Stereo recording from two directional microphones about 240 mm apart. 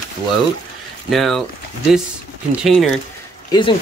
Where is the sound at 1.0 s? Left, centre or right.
Centre.